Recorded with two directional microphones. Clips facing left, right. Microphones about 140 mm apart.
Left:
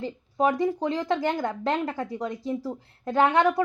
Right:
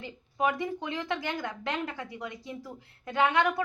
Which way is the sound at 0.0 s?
35° left (ahead or behind).